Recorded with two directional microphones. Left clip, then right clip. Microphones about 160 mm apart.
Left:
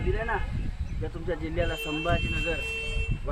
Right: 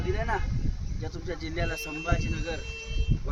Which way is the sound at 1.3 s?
70° right (ahead or behind).